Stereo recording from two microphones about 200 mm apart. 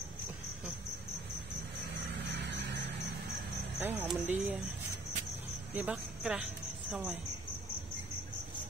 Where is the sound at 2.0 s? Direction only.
55° right (ahead or behind).